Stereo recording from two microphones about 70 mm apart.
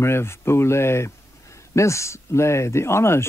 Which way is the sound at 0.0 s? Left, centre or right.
Left.